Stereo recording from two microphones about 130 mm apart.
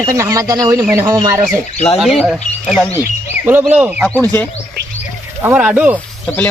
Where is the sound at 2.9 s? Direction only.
20° right (ahead or behind).